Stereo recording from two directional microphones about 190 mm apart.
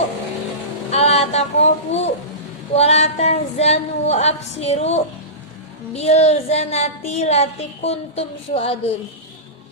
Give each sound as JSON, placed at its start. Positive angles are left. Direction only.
{"t": 0.9, "sound": "a woman's voice", "side_deg": 35}